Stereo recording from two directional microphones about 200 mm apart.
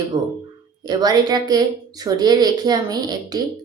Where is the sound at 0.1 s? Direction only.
20° right (ahead or behind).